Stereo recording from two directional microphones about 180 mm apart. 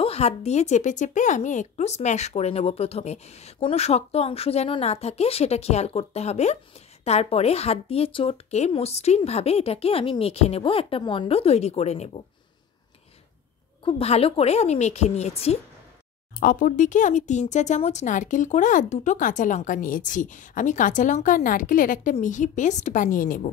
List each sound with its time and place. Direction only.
0.0 s speech: 35° left (ahead or behind)
13.8 s speech: 35° left (ahead or behind)
16.3 s speech: 50° left (ahead or behind)